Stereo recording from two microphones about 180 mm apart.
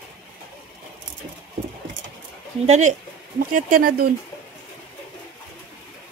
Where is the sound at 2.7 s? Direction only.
40° right (ahead or behind).